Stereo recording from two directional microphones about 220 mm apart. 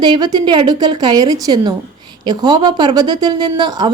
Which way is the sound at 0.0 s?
20° right (ahead or behind).